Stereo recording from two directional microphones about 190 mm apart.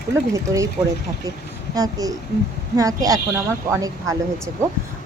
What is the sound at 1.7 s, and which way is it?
A child's voice, 20° right (ahead or behind).